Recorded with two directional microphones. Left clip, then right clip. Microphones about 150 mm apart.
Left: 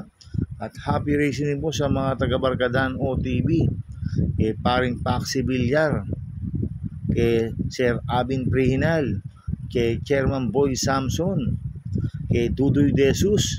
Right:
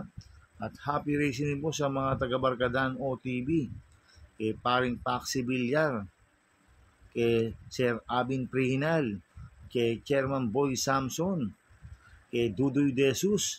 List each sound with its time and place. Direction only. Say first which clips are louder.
0.6 s speech: left 5 dB; 50° left (ahead or behind)
7.2 s speech: left 6 dB; 50° left (ahead or behind)